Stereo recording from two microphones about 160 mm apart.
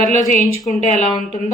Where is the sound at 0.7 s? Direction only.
45° left (ahead or behind).